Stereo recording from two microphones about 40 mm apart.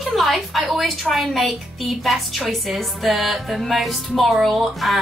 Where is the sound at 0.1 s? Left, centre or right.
Centre.